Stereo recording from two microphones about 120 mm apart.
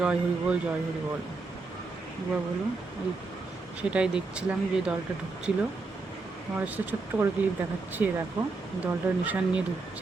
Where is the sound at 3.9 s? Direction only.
10° right (ahead or behind).